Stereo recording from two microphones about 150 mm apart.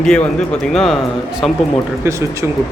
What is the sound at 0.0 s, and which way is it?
Speech, 5° left (ahead or behind).